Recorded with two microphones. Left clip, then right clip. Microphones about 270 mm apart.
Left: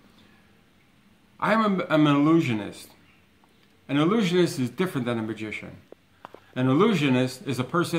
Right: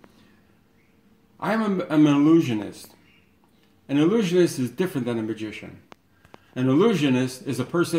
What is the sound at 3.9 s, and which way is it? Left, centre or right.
Speech, left.